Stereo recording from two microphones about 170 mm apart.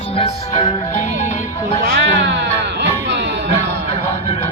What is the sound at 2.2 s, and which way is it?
Music, 90° right.